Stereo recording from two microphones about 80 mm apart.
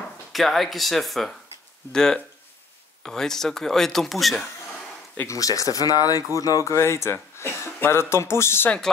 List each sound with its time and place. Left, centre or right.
0.3 s speech: centre
5.2 s speech: left
8.6 s speech: centre